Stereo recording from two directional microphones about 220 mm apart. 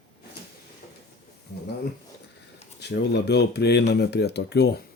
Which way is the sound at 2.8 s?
50° left (ahead or behind).